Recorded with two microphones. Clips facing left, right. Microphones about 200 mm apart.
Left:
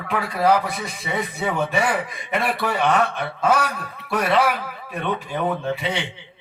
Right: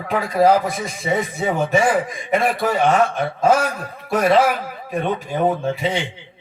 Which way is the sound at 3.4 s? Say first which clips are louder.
Right 3 dB; 65° left (ahead or behind).